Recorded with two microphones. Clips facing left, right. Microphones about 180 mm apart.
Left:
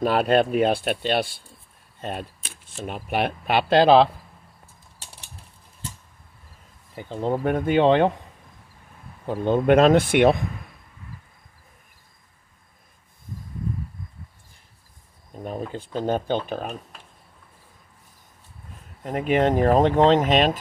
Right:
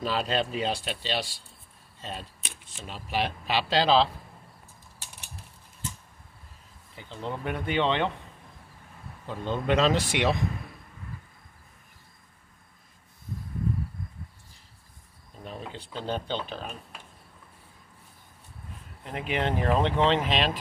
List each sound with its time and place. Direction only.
0.0 s speech: 55° left (ahead or behind)
2.0 s arrow: 55° left (ahead or behind)
2.7 s speech: 55° left (ahead or behind)
7.0 s speech: 50° left (ahead or behind)
9.2 s speech: 50° left (ahead or behind)
15.3 s speech: 45° left (ahead or behind)
19.0 s speech: 45° left (ahead or behind)